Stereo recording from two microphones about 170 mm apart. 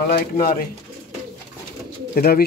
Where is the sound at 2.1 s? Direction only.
65° left (ahead or behind).